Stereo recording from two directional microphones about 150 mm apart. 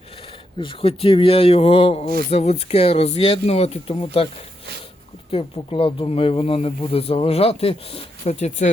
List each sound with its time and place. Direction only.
0.6 s speech: 35° left (ahead or behind)
5.3 s speech: 40° left (ahead or behind)
8.2 s speech: 50° left (ahead or behind)